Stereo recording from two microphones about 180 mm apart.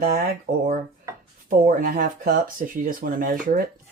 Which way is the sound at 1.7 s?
55° right (ahead or behind).